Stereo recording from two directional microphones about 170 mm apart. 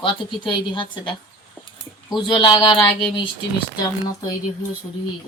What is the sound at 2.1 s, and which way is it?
Speech, 30° left (ahead or behind).